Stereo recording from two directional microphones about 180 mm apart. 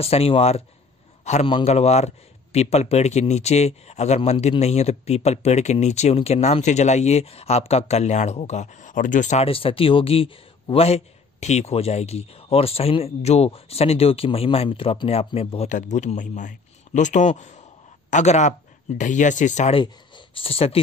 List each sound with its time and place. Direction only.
0.0 s speech: 35° left (ahead or behind)
19.8 s speech: 25° left (ahead or behind)